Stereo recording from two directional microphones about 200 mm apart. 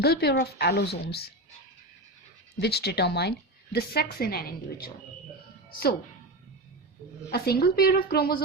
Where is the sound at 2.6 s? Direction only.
55° left (ahead or behind).